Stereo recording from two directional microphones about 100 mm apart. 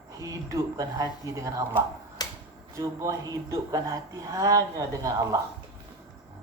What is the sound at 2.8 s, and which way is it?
A woman's voice, 35° right (ahead or behind).